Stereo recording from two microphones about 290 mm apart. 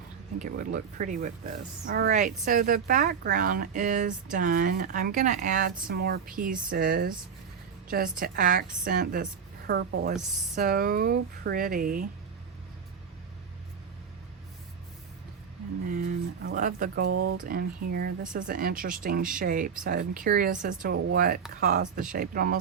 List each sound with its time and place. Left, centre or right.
0.3 s speech: right
15.9 s a sound: right
17.1 s speech: right
17.3 s speech: right